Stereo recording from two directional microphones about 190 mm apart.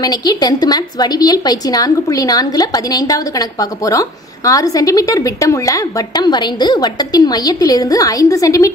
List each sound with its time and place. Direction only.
0.0 s a woman's voice: 20° left (ahead or behind)